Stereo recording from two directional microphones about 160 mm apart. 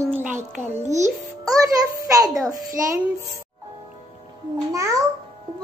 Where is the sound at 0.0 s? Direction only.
10° right (ahead or behind).